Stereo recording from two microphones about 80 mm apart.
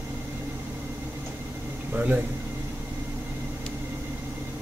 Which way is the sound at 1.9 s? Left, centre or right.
Centre.